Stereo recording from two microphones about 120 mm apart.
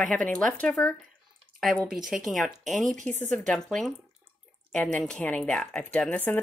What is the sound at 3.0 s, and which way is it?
Speech, 15° left (ahead or behind).